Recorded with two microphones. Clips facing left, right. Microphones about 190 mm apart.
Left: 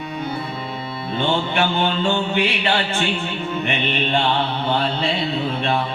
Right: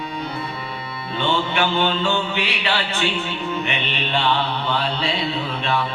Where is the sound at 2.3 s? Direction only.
50° left (ahead or behind).